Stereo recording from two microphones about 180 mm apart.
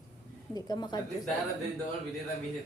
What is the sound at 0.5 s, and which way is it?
Speech, 20° left (ahead or behind).